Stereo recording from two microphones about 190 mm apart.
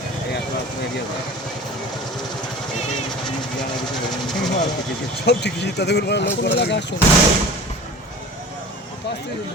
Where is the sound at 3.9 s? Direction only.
Centre (ahead or behind).